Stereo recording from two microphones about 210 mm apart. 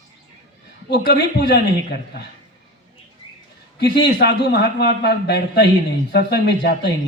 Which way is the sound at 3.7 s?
55° left (ahead or behind).